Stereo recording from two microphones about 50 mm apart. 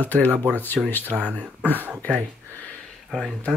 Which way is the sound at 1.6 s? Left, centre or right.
Left.